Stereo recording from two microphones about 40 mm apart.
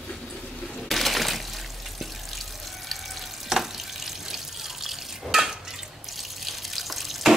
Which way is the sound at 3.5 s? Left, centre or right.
Centre.